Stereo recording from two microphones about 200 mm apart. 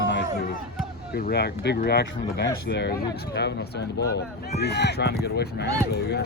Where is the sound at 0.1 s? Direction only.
55° left (ahead or behind).